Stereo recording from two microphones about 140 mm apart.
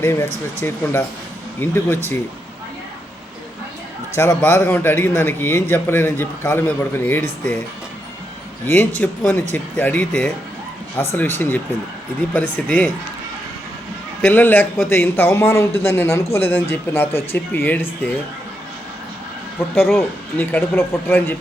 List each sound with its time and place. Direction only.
0.0 s a man's voice: 20° left (ahead or behind)
4.1 s a man's voice: 20° left (ahead or behind)
8.6 s a man's voice: 15° left (ahead or behind)
14.2 s a man's voice: 15° left (ahead or behind)
19.9 s a man's voice: 15° left (ahead or behind)